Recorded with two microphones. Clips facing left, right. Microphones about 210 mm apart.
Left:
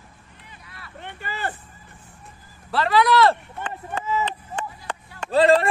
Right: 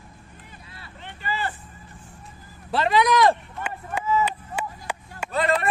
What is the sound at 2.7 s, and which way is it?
Speech, 20° right (ahead or behind).